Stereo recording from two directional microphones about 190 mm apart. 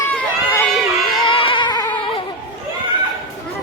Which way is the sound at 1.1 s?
25° left (ahead or behind).